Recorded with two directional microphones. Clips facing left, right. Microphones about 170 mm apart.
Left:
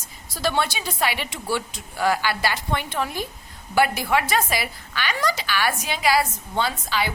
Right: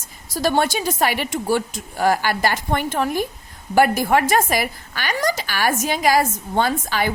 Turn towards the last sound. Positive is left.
turn(degrees=-50)  # may be behind; listen again after turning